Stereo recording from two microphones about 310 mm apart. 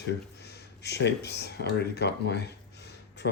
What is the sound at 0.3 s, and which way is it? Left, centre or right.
Speech, left.